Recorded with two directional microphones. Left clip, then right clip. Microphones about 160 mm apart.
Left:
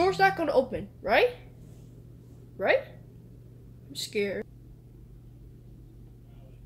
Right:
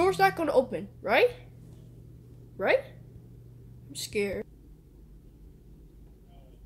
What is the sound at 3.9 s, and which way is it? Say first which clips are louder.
Speech: left 1 dB; 15° right (ahead or behind).